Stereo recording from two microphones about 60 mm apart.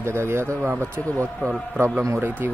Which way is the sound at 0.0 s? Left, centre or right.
Right.